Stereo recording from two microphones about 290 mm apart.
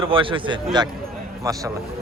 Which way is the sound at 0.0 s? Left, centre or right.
Centre.